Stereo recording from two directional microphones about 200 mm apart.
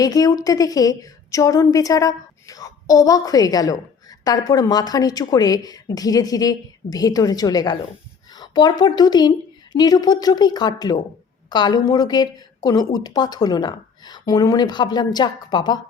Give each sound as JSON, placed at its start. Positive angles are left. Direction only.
{"t": 0.0, "sound": "a woman's voice", "side_deg": 20}
{"t": 8.4, "sound": "a sound", "side_deg": 20}
{"t": 8.8, "sound": "a woman's voice", "side_deg": 20}